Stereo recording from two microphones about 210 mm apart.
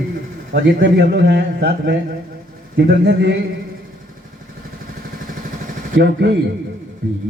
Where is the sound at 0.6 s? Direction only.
55° right (ahead or behind).